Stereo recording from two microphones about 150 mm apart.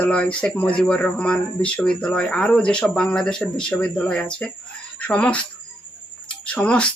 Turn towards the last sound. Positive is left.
turn(degrees=5)  # may be behind; listen again after turning